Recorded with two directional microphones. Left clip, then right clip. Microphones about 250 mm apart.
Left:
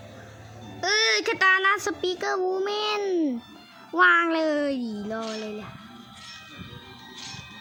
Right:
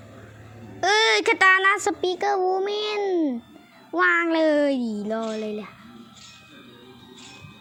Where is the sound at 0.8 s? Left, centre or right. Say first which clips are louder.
Right 4 dB; centre.